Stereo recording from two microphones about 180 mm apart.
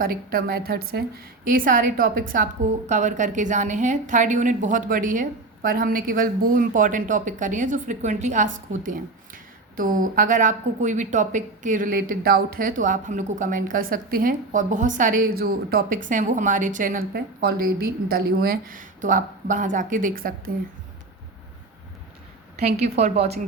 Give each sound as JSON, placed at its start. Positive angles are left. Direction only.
{"t": 0.0, "sound": "a woman's voice", "side_deg": -55}
{"t": 23.0, "sound": "a woman's voice", "side_deg": -35}